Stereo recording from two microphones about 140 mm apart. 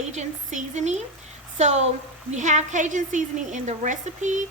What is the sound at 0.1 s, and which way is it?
A woman's voice, 55° right (ahead or behind).